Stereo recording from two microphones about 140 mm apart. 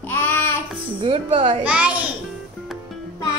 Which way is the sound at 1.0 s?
40° right (ahead or behind).